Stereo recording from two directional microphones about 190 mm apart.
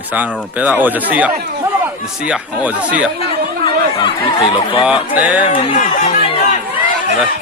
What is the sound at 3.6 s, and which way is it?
Chatter, 30° left (ahead or behind).